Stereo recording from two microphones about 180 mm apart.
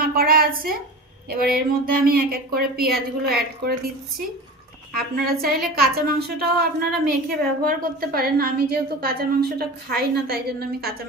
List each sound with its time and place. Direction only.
0.0 s a sound: 55° right (ahead or behind)
1.3 s a woman's voice: 55° right (ahead or behind)
4.9 s a woman's voice: 60° right (ahead or behind)